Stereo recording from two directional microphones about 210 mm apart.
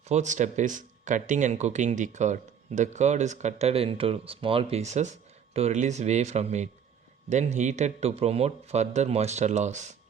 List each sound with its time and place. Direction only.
0.1 s speech: 35° right (ahead or behind)